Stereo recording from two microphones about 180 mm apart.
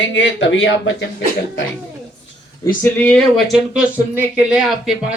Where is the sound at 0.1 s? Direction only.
90° left.